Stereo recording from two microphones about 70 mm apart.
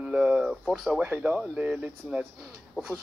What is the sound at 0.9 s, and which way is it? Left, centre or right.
Speech, centre.